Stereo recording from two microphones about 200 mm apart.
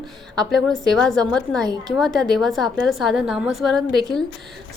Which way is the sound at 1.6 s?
20° right (ahead or behind).